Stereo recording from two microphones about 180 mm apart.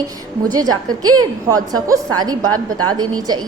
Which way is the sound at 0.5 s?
20° right (ahead or behind).